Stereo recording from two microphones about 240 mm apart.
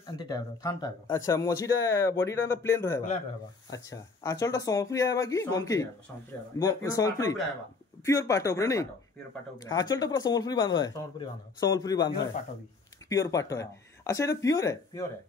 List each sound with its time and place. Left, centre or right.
0.0 s speech: centre
13.1 s speech: centre